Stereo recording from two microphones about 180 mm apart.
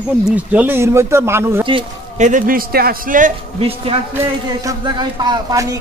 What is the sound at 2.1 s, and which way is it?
A man's voice, 45° right (ahead or behind).